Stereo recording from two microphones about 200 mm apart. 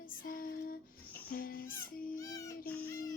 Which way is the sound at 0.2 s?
45° left (ahead or behind).